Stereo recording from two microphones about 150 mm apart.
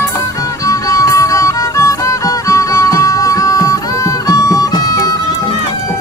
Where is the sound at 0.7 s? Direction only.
20° left (ahead or behind).